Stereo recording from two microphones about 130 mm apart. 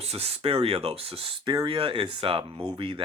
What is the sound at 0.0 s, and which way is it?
Speech, 50° right (ahead or behind).